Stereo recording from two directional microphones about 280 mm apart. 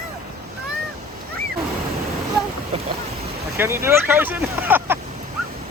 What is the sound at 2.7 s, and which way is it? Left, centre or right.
Speech, right.